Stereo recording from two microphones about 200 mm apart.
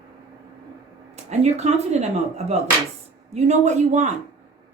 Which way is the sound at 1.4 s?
35° right (ahead or behind).